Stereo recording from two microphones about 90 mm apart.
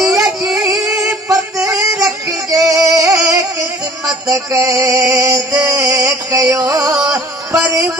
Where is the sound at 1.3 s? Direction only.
35° right (ahead or behind).